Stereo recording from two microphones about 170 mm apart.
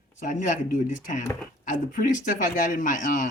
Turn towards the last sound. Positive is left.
turn(degrees=50)  # may be behind; listen again after turning